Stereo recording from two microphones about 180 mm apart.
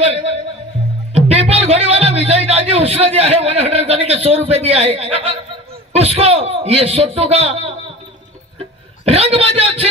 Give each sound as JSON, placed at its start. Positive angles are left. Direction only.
{"t": 0.1, "sound": "music", "side_deg": -35}
{"t": 1.1, "sound": "speech", "side_deg": -35}
{"t": 9.0, "sound": "speech", "side_deg": -30}